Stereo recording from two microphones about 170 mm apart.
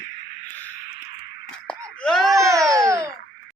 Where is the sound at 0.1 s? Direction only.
60° left (ahead or behind).